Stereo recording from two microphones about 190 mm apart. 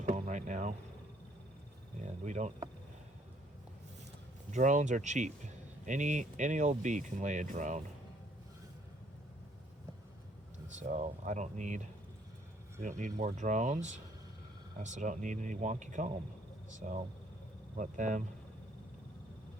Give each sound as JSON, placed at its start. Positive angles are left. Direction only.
{"t": 0.0, "sound": "a sound", "side_deg": -40}
{"t": 2.2, "sound": "speech", "side_deg": -40}
{"t": 4.5, "sound": "speech", "side_deg": -40}
{"t": 10.8, "sound": "speech", "side_deg": -40}
{"t": 13.0, "sound": "speech", "side_deg": -40}